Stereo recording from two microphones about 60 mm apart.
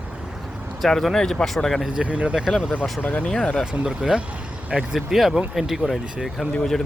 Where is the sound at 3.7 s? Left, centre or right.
Centre.